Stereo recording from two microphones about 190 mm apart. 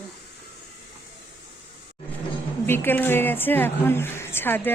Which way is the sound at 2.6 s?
10° left (ahead or behind).